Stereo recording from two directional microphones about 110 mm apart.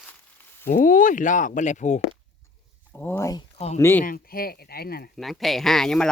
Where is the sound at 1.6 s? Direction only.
90° left.